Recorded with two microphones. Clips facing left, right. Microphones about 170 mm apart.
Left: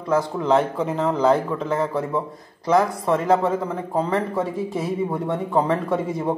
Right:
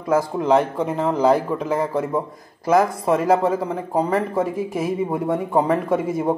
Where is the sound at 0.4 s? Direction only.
Centre (ahead or behind).